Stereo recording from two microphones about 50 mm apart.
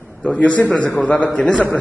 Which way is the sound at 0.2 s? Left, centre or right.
Left.